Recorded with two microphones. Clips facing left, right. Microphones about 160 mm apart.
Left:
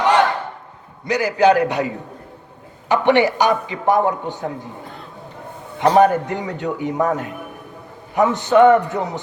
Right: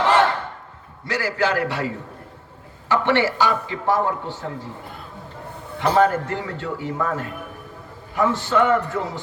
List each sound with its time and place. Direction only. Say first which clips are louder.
0.0 s a sound: left 2 dB; 15° left (ahead or behind)
1.0 s a man's voice: left 8 dB; 20° left (ahead or behind)
2.9 s a man's voice: left 4 dB; 15° left (ahead or behind)
5.9 s a man's voice: left 4 dB; 15° left (ahead or behind)